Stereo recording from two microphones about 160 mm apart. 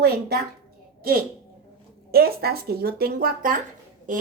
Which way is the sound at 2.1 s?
70° right (ahead or behind).